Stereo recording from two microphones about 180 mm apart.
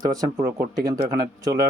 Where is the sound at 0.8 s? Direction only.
55° right (ahead or behind).